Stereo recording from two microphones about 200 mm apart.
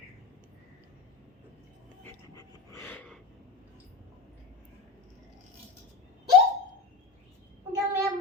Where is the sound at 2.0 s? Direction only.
15° left (ahead or behind).